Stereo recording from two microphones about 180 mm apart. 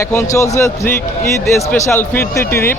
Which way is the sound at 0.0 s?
15° left (ahead or behind).